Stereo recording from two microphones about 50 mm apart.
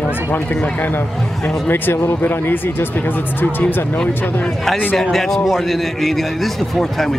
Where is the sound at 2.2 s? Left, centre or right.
Left.